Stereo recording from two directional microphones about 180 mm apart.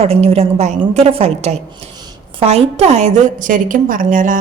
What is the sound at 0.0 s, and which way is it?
Speech, 35° right (ahead or behind).